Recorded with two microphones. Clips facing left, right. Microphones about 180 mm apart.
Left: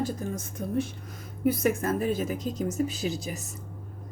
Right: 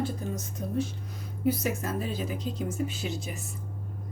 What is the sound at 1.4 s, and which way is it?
A woman's voice, 50° left (ahead or behind).